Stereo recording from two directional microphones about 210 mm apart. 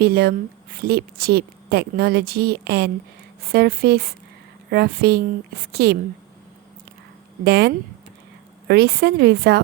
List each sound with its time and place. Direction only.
0.0 s a woman's voice: 45° right (ahead or behind)
7.4 s a woman's voice: 50° right (ahead or behind)